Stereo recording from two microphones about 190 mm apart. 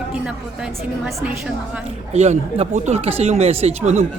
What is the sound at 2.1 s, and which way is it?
Speech, 35° right (ahead or behind).